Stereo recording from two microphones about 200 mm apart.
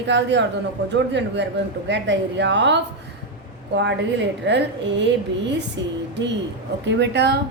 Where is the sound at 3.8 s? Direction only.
65° right (ahead or behind).